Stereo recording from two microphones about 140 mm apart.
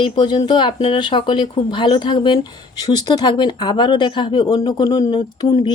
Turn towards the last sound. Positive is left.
turn(degrees=30)  # may be behind; listen again after turning